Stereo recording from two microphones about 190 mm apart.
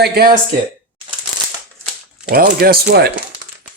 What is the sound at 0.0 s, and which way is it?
Speech, 55° right (ahead or behind).